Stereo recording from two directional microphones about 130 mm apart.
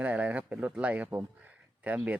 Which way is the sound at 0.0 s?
10° right (ahead or behind).